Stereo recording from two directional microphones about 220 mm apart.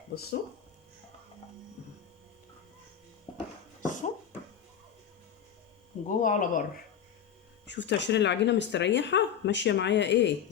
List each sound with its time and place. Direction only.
0.1 s speech: 45° left (ahead or behind)
6.1 s speech: 35° left (ahead or behind)
7.7 s speech: 55° left (ahead or behind)